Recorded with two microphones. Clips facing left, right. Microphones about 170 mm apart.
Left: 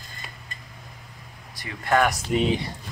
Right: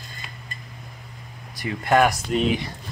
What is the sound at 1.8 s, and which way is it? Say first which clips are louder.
Speech: right 3 dB; 10° right (ahead or behind).